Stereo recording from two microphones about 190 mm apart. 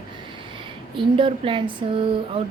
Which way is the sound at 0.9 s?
25° right (ahead or behind).